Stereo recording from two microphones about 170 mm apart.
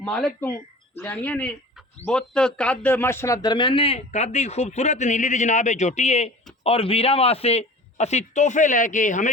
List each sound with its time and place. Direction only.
0.0 s a man's voice: 5° left (ahead or behind); by 9.3 s 50° left (ahead or behind)